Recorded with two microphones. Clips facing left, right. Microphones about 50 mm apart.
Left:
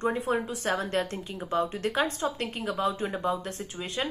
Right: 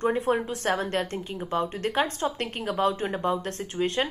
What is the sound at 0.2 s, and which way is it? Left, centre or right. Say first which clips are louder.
A woman's voice: right 3 dB; right.